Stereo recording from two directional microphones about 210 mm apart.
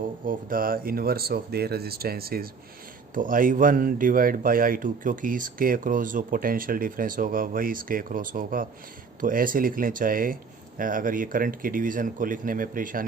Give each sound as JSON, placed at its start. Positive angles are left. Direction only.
{"t": 0.3, "sound": "speech", "side_deg": -45}